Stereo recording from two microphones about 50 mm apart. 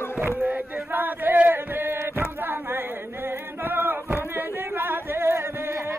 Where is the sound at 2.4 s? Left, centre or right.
Right.